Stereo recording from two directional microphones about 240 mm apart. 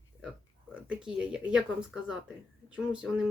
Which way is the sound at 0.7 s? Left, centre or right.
Centre.